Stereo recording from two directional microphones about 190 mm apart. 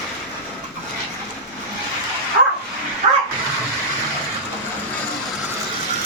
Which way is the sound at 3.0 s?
30° right (ahead or behind).